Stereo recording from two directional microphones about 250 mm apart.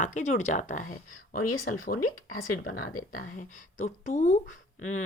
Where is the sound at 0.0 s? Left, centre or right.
Left.